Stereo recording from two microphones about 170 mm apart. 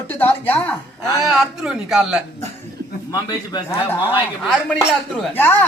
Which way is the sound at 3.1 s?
25° left (ahead or behind).